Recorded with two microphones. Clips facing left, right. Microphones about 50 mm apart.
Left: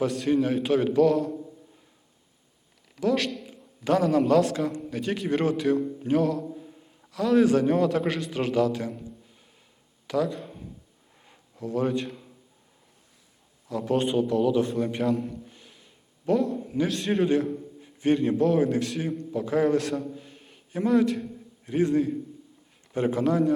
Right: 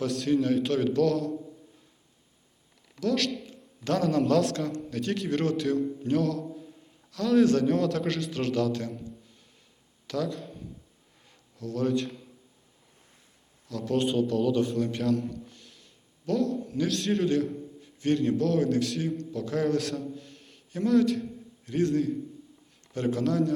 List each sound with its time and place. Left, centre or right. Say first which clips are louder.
0.0 s a man's voice: left 2 dB; centre
3.0 s a man's voice: left 2 dB; centre
10.1 s a sound: left 4 dB; centre
13.7 s a man's voice: left 4 dB; left
13.9 s a man's voice: left 2 dB; centre
20.1 s a sound: left 1 dB; centre
21.7 s a man's voice: left 2 dB; centre